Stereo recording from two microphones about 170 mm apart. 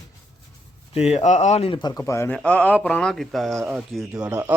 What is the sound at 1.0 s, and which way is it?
A man's voice, 40° left (ahead or behind).